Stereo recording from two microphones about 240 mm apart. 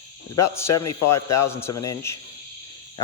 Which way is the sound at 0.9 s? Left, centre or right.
Left.